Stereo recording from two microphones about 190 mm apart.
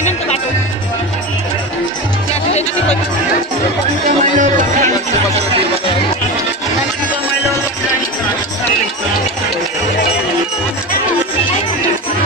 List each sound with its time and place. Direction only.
4.2 s music: 40° right (ahead or behind)